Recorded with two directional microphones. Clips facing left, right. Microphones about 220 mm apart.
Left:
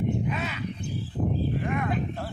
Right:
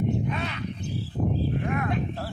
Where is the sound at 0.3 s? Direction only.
5° left (ahead or behind).